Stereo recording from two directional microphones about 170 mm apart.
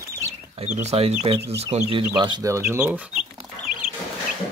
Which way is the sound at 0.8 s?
40° right (ahead or behind).